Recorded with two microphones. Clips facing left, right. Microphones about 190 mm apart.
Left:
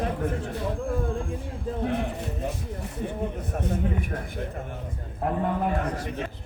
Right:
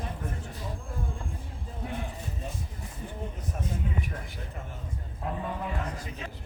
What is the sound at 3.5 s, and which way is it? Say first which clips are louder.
Speech: left 4 dB; 65° left (ahead or behind).